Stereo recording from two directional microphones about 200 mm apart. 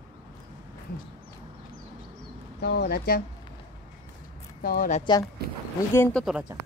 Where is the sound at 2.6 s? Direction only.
55° left (ahead or behind).